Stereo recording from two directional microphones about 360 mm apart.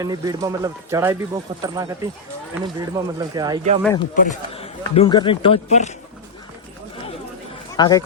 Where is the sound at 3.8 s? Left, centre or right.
Centre.